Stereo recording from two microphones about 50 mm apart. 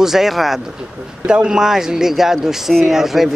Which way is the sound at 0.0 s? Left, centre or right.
Centre.